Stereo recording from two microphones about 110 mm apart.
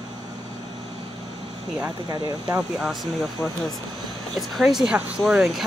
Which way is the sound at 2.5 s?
5° right (ahead or behind).